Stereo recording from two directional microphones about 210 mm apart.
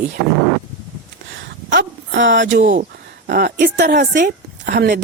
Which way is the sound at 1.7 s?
60° right (ahead or behind).